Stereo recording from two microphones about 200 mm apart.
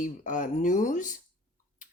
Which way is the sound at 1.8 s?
40° left (ahead or behind).